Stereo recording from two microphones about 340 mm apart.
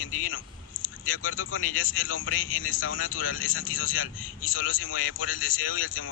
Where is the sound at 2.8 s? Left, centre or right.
Left.